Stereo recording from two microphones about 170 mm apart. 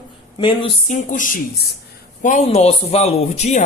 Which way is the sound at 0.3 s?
30° left (ahead or behind).